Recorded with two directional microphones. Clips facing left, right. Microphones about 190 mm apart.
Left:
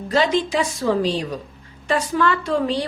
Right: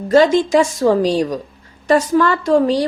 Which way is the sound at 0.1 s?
45° right (ahead or behind).